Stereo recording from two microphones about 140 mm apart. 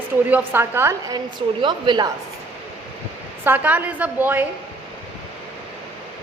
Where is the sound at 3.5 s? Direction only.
10° right (ahead or behind).